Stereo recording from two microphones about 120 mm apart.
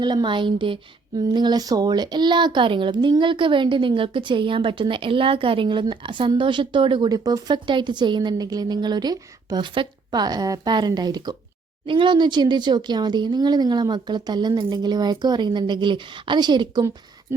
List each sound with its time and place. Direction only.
0.0 s speech: 40° right (ahead or behind)